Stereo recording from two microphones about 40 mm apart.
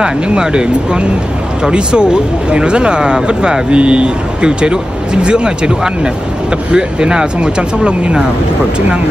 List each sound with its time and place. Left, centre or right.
0.0 s speech: right